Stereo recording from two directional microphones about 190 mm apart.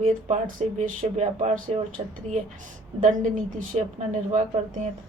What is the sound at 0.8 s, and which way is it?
Speech, 35° right (ahead or behind).